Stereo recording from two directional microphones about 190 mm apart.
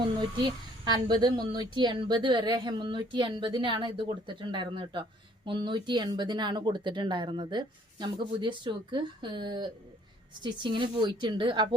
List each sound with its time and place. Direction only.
0.4 s a woman's voice: 20° right (ahead or behind)